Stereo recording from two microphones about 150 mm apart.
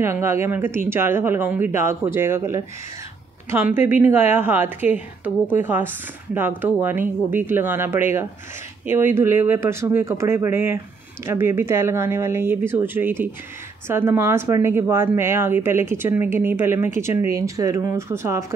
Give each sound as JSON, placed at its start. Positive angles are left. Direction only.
{"t": 0.0, "sound": "speech", "side_deg": -15}